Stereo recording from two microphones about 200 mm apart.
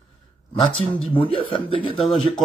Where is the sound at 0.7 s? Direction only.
30° left (ahead or behind).